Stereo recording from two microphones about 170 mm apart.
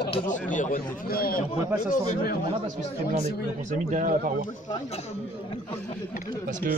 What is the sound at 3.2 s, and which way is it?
Speech, 45° right (ahead or behind).